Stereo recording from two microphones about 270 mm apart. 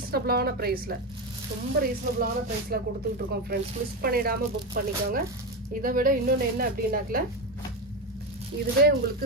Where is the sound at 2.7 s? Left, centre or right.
Right.